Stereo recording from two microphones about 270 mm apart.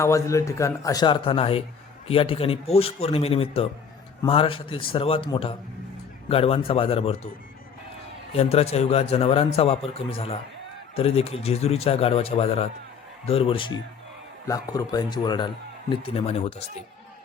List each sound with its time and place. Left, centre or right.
0.0 s a man's voice: centre
8.3 s a man's voice: left